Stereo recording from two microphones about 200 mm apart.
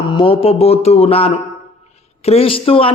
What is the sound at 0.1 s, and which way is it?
A man's voice, 25° left (ahead or behind).